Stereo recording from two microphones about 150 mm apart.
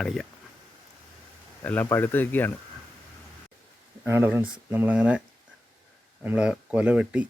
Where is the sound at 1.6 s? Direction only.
10° left (ahead or behind).